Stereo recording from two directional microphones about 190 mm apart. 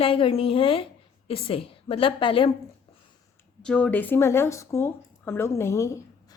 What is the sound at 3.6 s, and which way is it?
A woman's voice, 5° left (ahead or behind).